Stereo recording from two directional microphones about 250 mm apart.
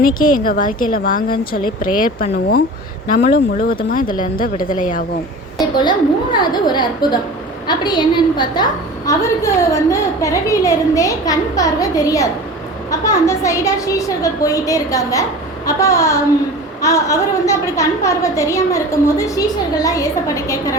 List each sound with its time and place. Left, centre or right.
0.0 s speech: left
5.5 s a woman's voice: centre